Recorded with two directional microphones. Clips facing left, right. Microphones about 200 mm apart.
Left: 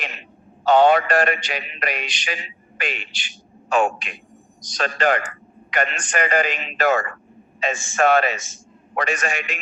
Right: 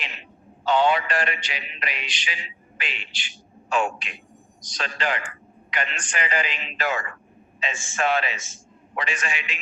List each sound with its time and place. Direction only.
0.0 s a man's voice: 45° left (ahead or behind)